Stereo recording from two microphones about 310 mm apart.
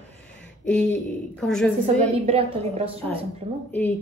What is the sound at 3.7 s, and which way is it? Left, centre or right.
Speech, centre.